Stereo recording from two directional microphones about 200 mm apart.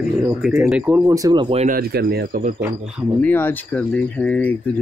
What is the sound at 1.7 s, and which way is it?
Speech, 50° right (ahead or behind).